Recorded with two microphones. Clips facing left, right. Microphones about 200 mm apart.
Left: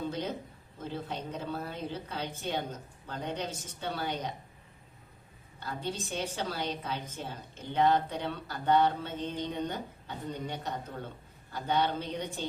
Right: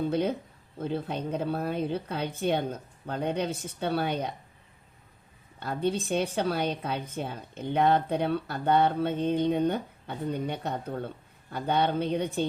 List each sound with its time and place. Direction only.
0.1 s a woman's voice: 60° right (ahead or behind)
5.5 s a woman's voice: 60° right (ahead or behind)